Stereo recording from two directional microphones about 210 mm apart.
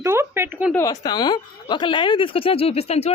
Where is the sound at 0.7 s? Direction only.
15° left (ahead or behind).